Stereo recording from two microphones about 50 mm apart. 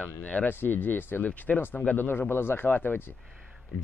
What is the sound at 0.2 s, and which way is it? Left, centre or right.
Speech, left.